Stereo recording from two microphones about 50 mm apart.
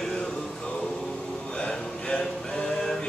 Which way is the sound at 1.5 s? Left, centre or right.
Centre.